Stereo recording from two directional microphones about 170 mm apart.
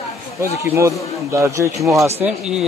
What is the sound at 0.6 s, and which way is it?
Speech, 15° right (ahead or behind).